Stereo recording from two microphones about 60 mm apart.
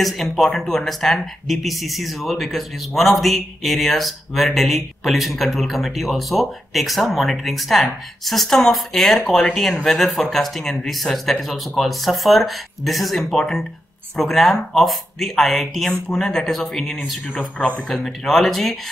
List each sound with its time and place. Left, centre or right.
0.0 s speech: centre
17.6 s speech: left
18.0 s speech: centre